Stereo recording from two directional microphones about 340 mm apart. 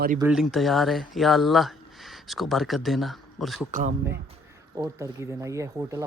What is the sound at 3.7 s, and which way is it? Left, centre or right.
Speech, right.